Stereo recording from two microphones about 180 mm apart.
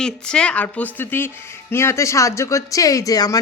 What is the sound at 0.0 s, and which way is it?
A woman's voice, 5° left (ahead or behind).